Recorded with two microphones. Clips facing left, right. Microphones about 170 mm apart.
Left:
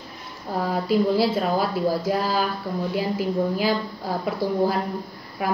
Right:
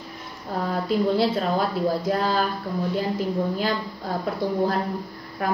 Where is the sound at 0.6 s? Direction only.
5° left (ahead or behind).